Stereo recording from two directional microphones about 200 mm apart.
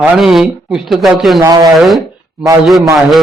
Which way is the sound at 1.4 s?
20° right (ahead or behind).